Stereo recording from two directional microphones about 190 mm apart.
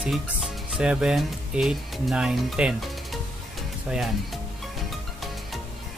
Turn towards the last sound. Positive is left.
turn(degrees=0)  # may be behind; listen again after turning